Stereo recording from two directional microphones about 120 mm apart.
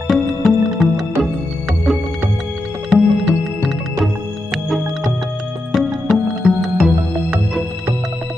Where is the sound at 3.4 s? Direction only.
Centre (ahead or behind).